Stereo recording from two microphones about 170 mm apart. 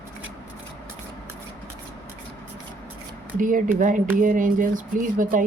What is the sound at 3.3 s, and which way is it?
Speech, 50° right (ahead or behind).